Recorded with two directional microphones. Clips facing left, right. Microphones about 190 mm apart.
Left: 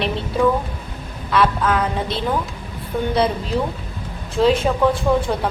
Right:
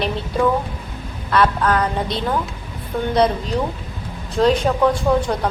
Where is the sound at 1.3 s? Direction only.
Centre (ahead or behind).